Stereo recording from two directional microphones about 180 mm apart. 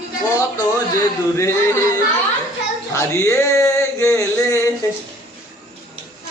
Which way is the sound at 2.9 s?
15° left (ahead or behind).